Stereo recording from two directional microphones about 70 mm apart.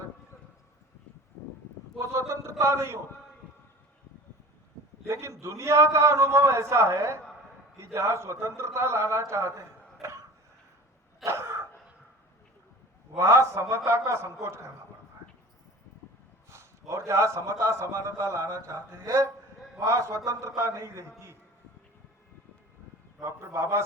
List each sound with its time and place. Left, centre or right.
2.0 s a sound: right
5.0 s a man's voice: right
11.3 s a sound: right
13.1 s a man's voice: right
16.5 s a man's voice: right
23.2 s a man's voice: right